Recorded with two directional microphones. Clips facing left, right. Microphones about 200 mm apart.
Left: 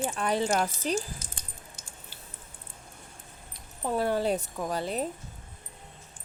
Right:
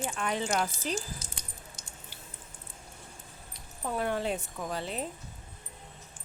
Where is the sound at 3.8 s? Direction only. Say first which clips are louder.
Left 4 dB; 35° left (ahead or behind).